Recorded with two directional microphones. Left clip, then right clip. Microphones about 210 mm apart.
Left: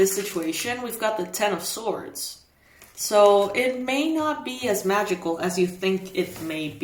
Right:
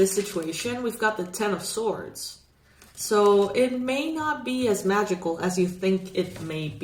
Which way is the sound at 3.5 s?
25° left (ahead or behind).